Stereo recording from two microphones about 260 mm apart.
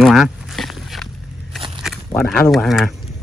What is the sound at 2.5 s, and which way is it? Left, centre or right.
Speech, centre.